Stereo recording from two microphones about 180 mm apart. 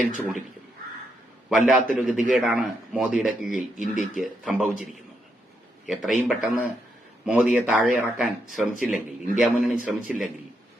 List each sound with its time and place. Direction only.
0.2 s speech: 5° right (ahead or behind)
1.5 s speech: centre (ahead or behind)
3.8 s speech: 45° left (ahead or behind)
4.2 s speech: 5° right (ahead or behind)